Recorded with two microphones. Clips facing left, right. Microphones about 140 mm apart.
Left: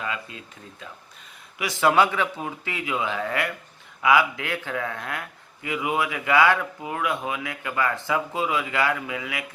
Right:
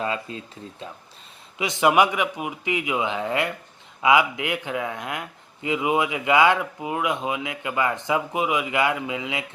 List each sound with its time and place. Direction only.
0.0 s a man's voice: 30° right (ahead or behind)